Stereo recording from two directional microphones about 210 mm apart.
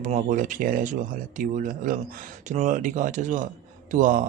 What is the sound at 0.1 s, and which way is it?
A man's voice, 35° right (ahead or behind).